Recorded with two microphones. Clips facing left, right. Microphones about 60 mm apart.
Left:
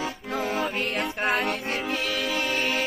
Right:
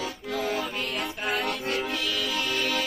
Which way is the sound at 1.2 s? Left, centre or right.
Left.